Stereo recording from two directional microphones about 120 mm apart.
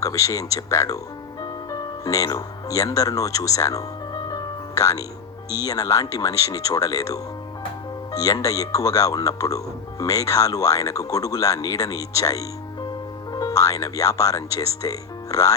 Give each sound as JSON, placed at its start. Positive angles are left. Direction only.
{"t": 0.0, "sound": "speech", "side_deg": 30}
{"t": 1.4, "sound": "music", "side_deg": 30}
{"t": 5.6, "sound": "speech", "side_deg": 30}